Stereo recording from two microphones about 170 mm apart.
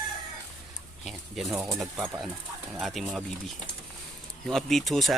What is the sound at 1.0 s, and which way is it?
Speech, centre (ahead or behind).